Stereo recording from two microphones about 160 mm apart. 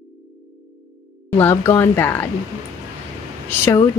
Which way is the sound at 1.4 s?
15° left (ahead or behind).